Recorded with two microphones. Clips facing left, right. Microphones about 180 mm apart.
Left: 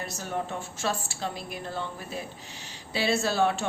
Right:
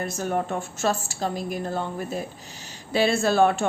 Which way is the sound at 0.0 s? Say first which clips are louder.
Right 6 dB; 50° right (ahead or behind).